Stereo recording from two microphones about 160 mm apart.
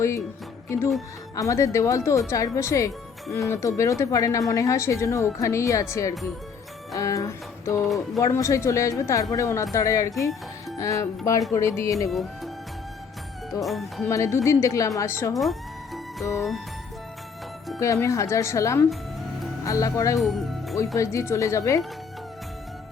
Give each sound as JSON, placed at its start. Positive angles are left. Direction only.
{"t": 1.4, "sound": "speech", "side_deg": 20}
{"t": 13.5, "sound": "speech", "side_deg": 0}
{"t": 14.0, "sound": "speech", "side_deg": 20}
{"t": 17.7, "sound": "speech", "side_deg": 20}
{"t": 20.1, "sound": "music", "side_deg": 0}
{"t": 20.7, "sound": "speech", "side_deg": 20}